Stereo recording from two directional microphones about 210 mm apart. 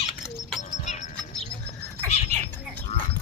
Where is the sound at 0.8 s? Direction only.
35° left (ahead or behind).